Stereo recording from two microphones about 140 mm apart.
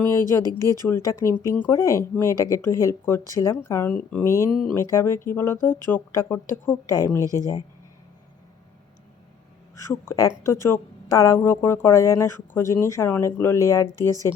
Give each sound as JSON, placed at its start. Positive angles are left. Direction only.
{"t": 0.0, "sound": "a woman's voice", "side_deg": 20}
{"t": 0.6, "sound": "speech", "side_deg": -25}
{"t": 0.9, "sound": "a woman's voice", "side_deg": 20}
{"t": 4.7, "sound": "a woman's voice", "side_deg": 20}
{"t": 9.7, "sound": "a woman's voice", "side_deg": 20}